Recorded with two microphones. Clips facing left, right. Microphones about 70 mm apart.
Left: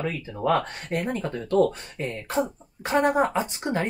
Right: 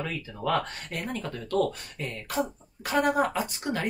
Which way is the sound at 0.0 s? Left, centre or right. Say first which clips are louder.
Left 4 dB; left.